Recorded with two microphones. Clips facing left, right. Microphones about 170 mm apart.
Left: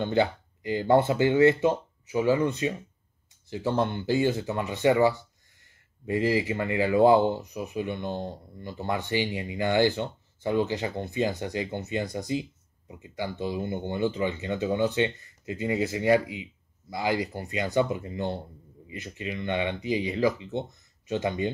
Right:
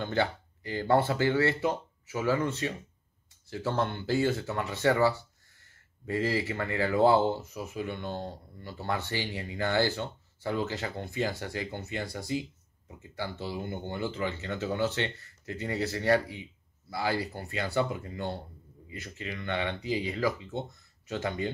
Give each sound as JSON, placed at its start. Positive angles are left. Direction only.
{"t": 0.0, "sound": "speech", "side_deg": 20}